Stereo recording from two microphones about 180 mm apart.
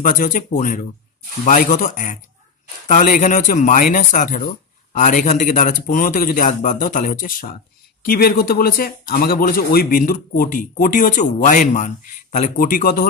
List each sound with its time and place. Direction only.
0.0 s speech: 45° left (ahead or behind)